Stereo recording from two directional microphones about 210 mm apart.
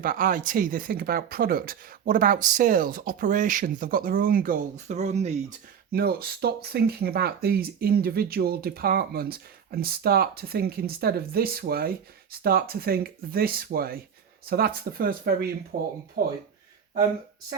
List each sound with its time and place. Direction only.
0.0 s speech: 45° right (ahead or behind)
5.9 s speech: 45° right (ahead or behind)